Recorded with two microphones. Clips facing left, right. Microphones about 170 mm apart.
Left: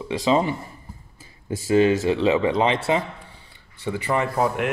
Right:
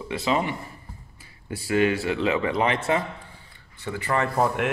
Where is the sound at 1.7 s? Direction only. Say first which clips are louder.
Left 5 dB; 25° left (ahead or behind).